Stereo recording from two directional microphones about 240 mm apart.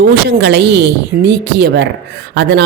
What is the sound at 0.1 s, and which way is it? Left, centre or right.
Speech, right.